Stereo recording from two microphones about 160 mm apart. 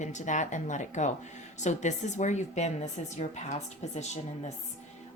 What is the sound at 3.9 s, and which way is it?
Speech, 45° left (ahead or behind).